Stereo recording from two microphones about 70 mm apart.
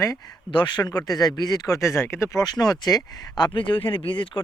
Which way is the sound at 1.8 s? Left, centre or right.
Left.